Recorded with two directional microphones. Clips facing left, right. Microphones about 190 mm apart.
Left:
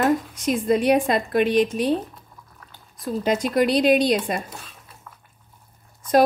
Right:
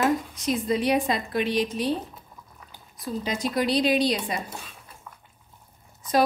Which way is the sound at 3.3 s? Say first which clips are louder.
Left 6 dB; 50° left (ahead or behind).